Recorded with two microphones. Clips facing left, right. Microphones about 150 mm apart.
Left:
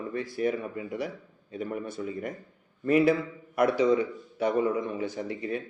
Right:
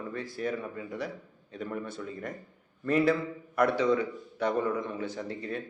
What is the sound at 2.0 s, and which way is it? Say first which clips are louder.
A man's voice: left 4 dB; 20° left (ahead or behind).